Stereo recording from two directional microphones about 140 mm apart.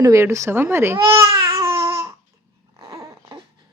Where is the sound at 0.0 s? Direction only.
20° right (ahead or behind).